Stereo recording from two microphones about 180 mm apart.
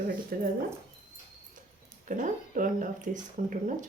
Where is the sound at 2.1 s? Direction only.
45° right (ahead or behind).